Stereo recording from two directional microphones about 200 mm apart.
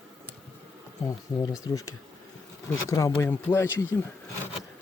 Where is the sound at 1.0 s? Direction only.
20° left (ahead or behind).